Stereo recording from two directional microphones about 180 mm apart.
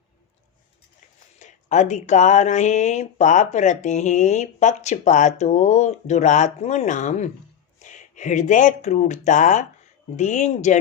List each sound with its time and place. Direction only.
1.4 s speech: 40° left (ahead or behind)